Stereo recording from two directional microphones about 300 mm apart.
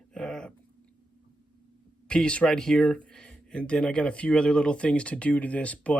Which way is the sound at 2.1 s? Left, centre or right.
Centre.